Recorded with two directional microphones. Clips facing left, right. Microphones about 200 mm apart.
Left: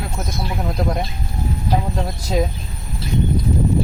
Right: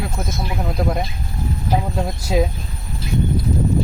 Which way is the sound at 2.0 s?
10° right (ahead or behind).